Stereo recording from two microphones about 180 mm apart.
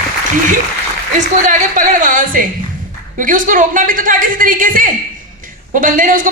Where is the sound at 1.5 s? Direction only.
45° right (ahead or behind).